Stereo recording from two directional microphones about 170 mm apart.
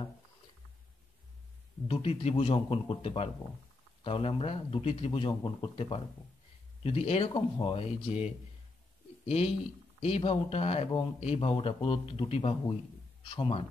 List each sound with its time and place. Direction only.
1.9 s a man's voice: 35° left (ahead or behind)